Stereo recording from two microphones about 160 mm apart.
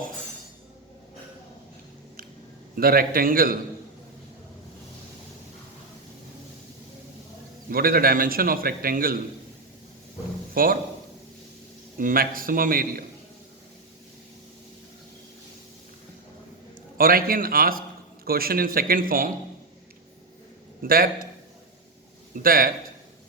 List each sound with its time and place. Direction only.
2.7 s a man's voice: 65° right (ahead or behind)
7.7 s a man's voice: 65° right (ahead or behind)
10.5 s a man's voice: 65° right (ahead or behind)
11.9 s a man's voice: 60° right (ahead or behind)
17.0 s a man's voice: 65° right (ahead or behind)
20.8 s a man's voice: 65° right (ahead or behind)
22.4 s a man's voice: 65° right (ahead or behind)